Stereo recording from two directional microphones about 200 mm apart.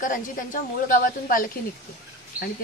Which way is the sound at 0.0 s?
40° left (ahead or behind).